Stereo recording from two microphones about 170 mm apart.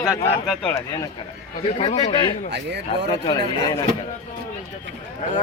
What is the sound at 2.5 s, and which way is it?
Speech, 90° right.